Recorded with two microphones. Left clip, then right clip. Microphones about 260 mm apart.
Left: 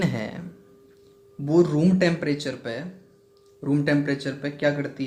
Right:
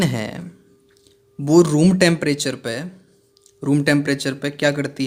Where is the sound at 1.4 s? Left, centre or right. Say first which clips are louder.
Right 6 dB; right.